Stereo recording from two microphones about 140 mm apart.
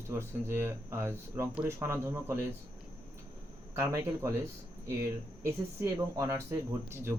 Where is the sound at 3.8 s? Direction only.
20° right (ahead or behind).